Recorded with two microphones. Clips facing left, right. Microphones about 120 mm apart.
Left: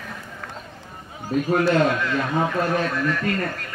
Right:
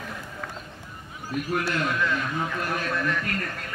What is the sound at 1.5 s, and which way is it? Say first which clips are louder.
A man's voice: left 8 dB; 30° left (ahead or behind).